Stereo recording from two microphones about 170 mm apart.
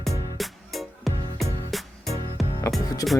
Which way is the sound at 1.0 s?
Centre (ahead or behind).